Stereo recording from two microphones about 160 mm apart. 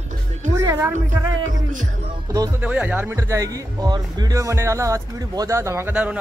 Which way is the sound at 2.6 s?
10° right (ahead or behind).